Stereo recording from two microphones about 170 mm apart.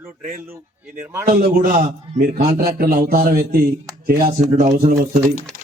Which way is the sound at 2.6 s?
60° right (ahead or behind).